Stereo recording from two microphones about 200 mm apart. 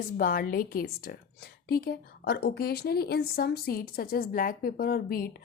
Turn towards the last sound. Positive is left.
turn(degrees=45)  # may be behind; listen again after turning